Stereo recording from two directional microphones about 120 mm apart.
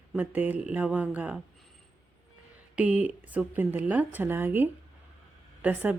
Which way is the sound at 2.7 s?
10° right (ahead or behind).